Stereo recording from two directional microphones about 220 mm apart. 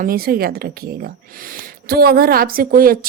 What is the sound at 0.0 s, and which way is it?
A woman's voice, 40° right (ahead or behind).